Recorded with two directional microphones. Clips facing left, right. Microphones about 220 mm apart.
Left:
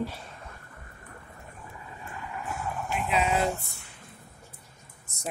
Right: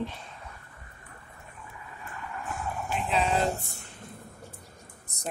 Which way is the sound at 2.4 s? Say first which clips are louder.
Even; 10° left (ahead or behind).